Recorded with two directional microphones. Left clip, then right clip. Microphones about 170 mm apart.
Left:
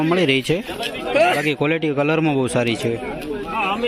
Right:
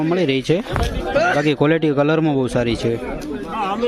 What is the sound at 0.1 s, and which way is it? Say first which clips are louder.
Speech: right 1 dB; 20° right (ahead or behind).